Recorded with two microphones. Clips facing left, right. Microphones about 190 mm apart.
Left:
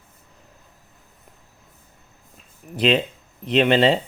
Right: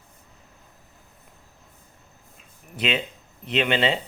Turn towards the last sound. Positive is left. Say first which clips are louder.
# left 6 dB
turn(degrees=35)  # may be behind; listen again after turning